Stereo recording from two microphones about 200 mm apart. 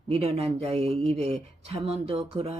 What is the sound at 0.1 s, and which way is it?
Speech, 30° right (ahead or behind).